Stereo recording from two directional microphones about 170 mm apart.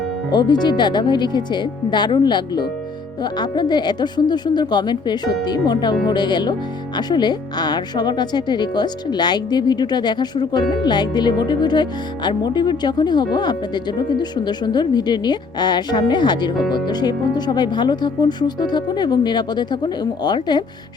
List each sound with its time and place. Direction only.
0.3 s speech: 25° left (ahead or behind)